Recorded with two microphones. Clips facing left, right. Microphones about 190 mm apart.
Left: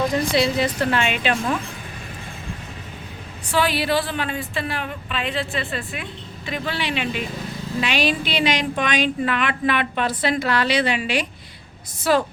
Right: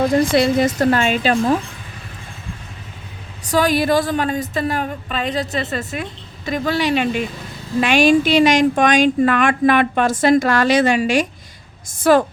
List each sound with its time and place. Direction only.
0.1 s a woman's voice: 50° right (ahead or behind)
3.4 s a woman's voice: 40° right (ahead or behind)